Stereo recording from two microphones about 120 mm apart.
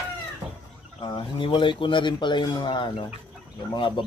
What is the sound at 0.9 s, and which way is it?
Speech, 45° left (ahead or behind).